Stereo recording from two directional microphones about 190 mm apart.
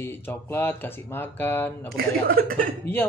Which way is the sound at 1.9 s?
50° right (ahead or behind).